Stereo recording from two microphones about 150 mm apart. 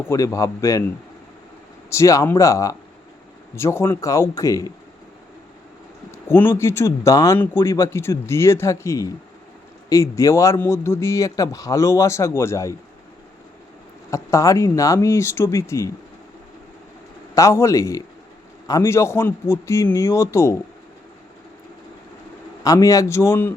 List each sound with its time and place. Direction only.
0.1 s speech: 20° left (ahead or behind)
1.9 s speech: 20° left (ahead or behind)
6.1 s speech: 15° left (ahead or behind)
14.1 s speech: 20° left (ahead or behind)
17.3 s speech: 20° left (ahead or behind)
22.6 s speech: 20° left (ahead or behind)